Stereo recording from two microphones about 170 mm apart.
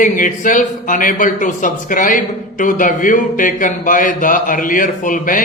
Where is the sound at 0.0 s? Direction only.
50° left (ahead or behind).